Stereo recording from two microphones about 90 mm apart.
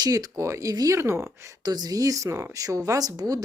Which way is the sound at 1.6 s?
50° right (ahead or behind).